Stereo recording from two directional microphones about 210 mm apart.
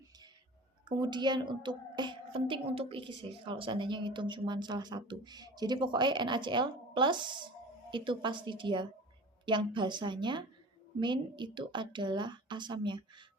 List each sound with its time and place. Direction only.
0.9 s a woman's voice: 20° right (ahead or behind)